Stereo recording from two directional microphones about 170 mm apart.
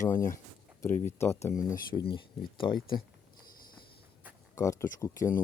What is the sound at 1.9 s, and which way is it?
Speech, 25° left (ahead or behind).